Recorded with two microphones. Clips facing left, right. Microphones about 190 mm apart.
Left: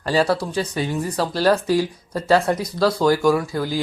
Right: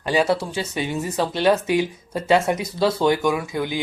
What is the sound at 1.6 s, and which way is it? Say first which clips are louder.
Speech: left 1 dB; 20° right (ahead or behind).